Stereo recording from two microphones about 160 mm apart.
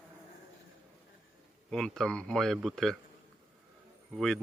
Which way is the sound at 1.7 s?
5° left (ahead or behind).